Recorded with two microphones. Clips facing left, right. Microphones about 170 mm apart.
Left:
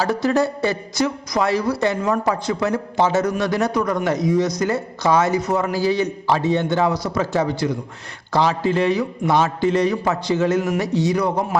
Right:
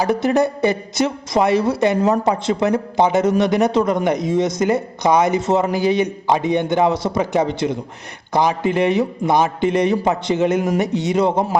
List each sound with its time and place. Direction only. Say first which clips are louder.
0.0 s a man's voice: right 2 dB; 20° right (ahead or behind)